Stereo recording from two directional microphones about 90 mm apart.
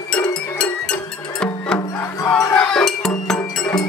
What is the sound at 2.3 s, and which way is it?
Music, 10° left (ahead or behind).